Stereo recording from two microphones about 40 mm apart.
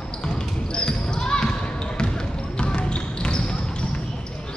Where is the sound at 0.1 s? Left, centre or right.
Left.